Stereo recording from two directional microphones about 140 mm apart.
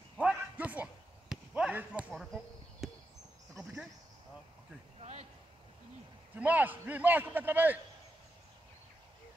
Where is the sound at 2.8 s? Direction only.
Centre (ahead or behind).